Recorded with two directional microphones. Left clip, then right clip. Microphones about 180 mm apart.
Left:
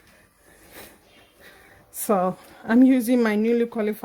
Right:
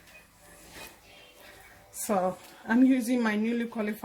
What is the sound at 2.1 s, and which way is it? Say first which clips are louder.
Speech: left 6 dB; 55° left (ahead or behind).